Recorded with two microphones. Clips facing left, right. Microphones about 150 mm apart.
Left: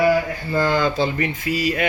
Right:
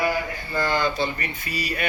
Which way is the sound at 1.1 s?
90° left.